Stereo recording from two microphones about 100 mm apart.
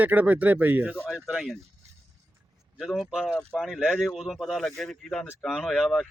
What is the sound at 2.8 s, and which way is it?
Speech, centre (ahead or behind).